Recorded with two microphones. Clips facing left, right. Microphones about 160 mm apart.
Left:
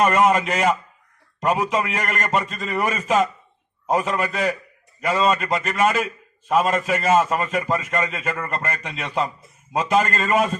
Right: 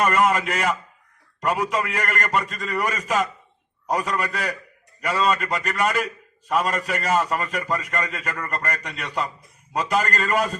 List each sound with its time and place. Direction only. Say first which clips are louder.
0.0 s a man's voice: left 3 dB; 25° left (ahead or behind)